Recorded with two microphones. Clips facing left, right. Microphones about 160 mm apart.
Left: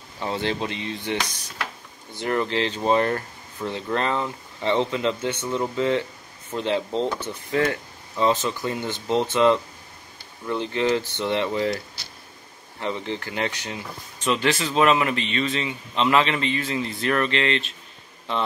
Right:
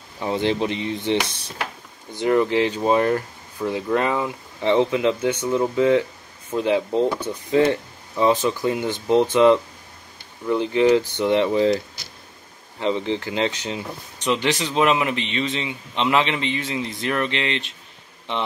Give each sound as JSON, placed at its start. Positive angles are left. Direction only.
{"t": 0.2, "sound": "speech", "side_deg": -15}
{"t": 12.8, "sound": "speech", "side_deg": -20}